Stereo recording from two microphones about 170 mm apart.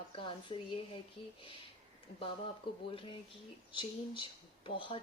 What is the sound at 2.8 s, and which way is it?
Speech, 30° left (ahead or behind).